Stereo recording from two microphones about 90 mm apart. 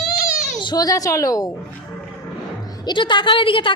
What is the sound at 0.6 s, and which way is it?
Speech, 50° left (ahead or behind).